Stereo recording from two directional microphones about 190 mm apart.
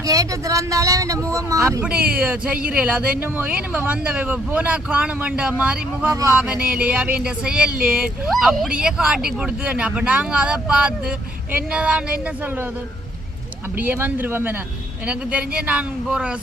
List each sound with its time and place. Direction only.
0.0 s speech: 20° right (ahead or behind)
13.7 s speech: 10° right (ahead or behind)